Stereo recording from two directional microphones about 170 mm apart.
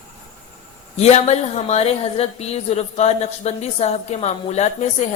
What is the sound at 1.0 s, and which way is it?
A woman's voice, 40° left (ahead or behind).